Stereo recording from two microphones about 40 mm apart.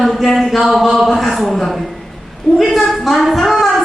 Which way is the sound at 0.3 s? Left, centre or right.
Centre.